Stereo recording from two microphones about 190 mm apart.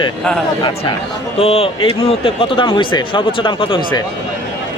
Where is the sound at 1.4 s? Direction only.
30° left (ahead or behind).